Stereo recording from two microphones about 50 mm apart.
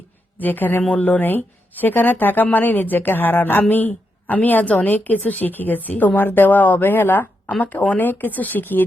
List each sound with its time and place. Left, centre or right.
0.3 s speech: left
0.8 s speech: left
1.2 s speech: left